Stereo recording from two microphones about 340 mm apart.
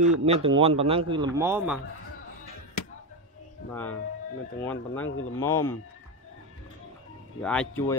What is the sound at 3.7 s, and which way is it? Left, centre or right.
Speech, centre.